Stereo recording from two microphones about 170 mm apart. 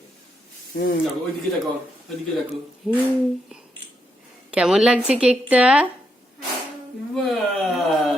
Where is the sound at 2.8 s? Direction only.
5° right (ahead or behind).